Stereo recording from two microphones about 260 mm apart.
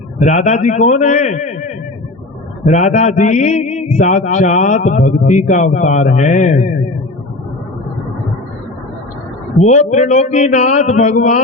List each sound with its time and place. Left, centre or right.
0.2 s a man's voice: left
2.6 s a man's voice: left
9.6 s a man's voice: left